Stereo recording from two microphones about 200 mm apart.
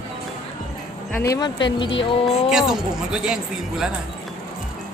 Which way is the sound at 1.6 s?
65° left (ahead or behind).